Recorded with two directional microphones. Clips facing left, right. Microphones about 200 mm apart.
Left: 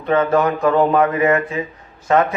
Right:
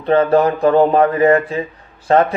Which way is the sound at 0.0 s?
35° right (ahead or behind).